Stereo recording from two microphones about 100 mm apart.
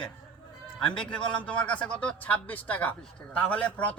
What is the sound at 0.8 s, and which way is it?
A man's voice, 10° left (ahead or behind).